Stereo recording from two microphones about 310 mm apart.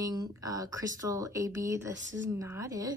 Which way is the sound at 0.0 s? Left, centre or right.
Centre.